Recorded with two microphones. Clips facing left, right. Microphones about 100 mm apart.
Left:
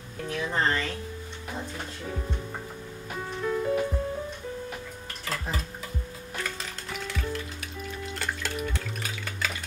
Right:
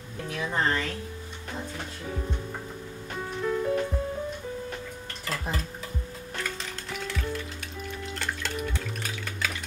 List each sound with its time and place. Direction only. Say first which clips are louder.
0.3 s speech: even; centre (ahead or behind)
2.0 s speech: right 1 dB; centre (ahead or behind)
3.2 s music: right 1 dB; centre (ahead or behind)
6.3 s music: even; centre (ahead or behind)
8.0 s drip: left 1 dB; 5° left (ahead or behind)